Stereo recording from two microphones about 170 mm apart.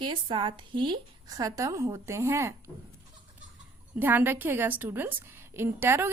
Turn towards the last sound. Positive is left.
turn(degrees=-15)  # may be behind; listen again after turning